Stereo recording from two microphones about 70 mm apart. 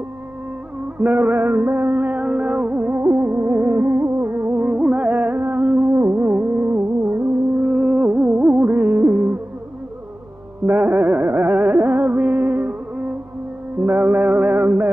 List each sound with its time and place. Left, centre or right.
0.9 s music: right
3.0 s music: right
4.6 s music: centre
5.4 s a sound: right
5.9 s music: right
10.7 s music: right
13.8 s a sound: right